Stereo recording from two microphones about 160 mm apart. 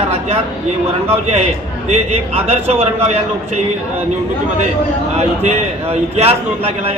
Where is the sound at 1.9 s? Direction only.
40° right (ahead or behind).